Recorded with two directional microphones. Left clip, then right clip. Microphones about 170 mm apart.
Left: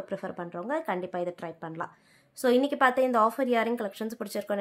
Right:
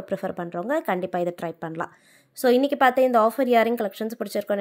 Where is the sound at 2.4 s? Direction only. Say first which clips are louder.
Right 4 dB; 25° right (ahead or behind).